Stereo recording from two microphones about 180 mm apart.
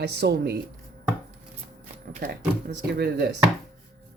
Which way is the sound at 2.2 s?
55° right (ahead or behind).